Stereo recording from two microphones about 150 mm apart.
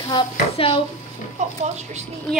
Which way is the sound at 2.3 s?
5° left (ahead or behind).